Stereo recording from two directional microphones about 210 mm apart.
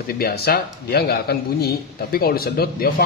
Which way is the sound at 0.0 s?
45° left (ahead or behind).